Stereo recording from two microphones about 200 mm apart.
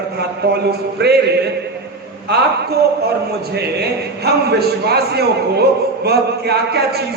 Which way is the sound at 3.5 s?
55° right (ahead or behind).